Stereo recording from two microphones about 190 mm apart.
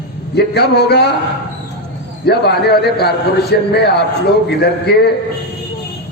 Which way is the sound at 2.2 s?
60° left (ahead or behind).